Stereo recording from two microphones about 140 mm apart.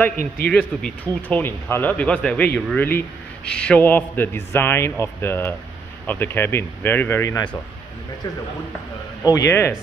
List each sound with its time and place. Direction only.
0.4 s speech: 10° left (ahead or behind)
9.3 s speech: 20° left (ahead or behind)